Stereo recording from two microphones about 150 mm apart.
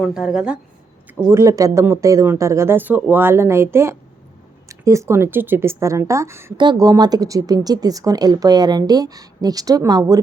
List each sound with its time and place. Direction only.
0.0 s speech: 5° right (ahead or behind)
1.3 s speech: 20° right (ahead or behind)